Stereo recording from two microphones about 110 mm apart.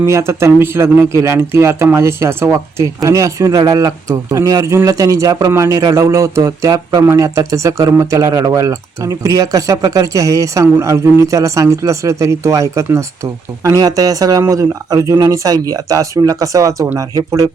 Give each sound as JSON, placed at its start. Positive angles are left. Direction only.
{"t": 0.0, "sound": "speech", "side_deg": -25}